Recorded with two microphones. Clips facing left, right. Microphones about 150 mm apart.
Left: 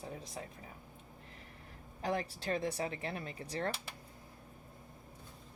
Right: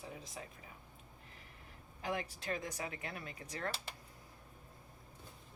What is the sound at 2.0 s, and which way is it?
Speech, 35° left (ahead or behind).